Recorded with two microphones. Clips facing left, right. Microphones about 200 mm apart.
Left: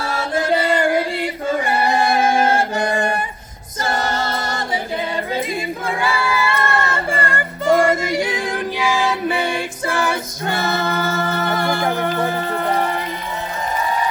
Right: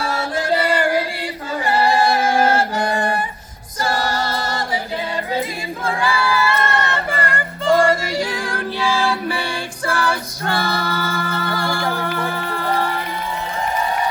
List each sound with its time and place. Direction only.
0.3 s singing: 20° left (ahead or behind)
3.8 s choir: 25° left (ahead or behind)
5.8 s music: 20° left (ahead or behind)
6.6 s music: 25° right (ahead or behind)
6.9 s choir: 25° left (ahead or behind)
7.7 s music: 20° left (ahead or behind)